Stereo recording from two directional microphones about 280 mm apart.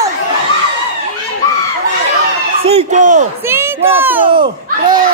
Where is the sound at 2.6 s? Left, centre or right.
Right.